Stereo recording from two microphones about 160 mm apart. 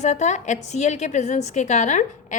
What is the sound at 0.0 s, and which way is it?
A woman's voice, 45° left (ahead or behind).